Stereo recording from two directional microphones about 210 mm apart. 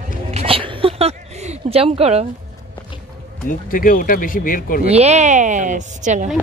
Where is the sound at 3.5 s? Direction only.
40° left (ahead or behind).